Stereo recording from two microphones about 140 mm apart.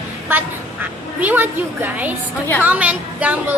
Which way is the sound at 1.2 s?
15° right (ahead or behind).